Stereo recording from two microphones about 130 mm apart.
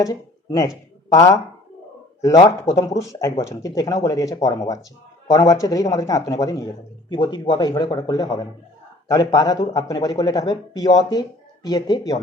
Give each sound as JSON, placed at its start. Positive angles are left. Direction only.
{"t": 0.0, "sound": "a man's voice", "side_deg": 30}